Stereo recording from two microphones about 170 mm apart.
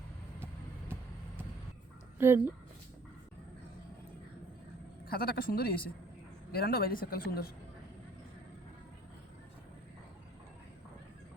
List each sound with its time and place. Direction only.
2.1 s speech: 15° right (ahead or behind)
5.0 s a woman's voice: 60° left (ahead or behind)